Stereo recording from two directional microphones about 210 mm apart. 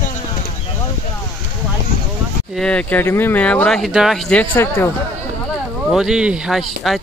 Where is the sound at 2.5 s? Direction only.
5° left (ahead or behind).